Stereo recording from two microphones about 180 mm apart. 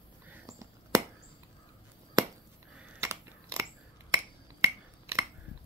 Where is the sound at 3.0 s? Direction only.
15° right (ahead or behind).